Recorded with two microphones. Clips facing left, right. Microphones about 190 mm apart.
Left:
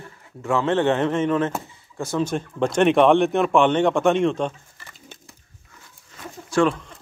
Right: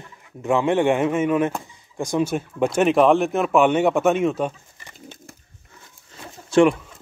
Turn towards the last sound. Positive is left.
turn(degrees=-15)  # may be behind; listen again after turning